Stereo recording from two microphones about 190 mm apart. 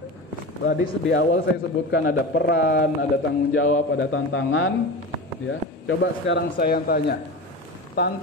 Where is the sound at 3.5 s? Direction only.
90° left.